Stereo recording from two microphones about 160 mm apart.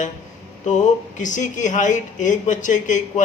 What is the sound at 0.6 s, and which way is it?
Speech, 50° left (ahead or behind).